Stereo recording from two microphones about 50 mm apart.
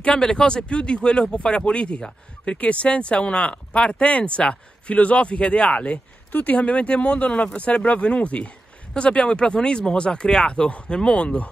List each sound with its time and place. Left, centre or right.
0.0 s speech: centre